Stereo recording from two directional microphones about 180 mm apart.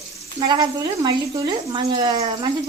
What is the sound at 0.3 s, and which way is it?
Speech, 25° right (ahead or behind).